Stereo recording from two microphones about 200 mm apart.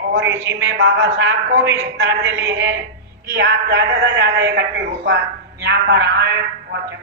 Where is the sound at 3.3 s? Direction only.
55° right (ahead or behind).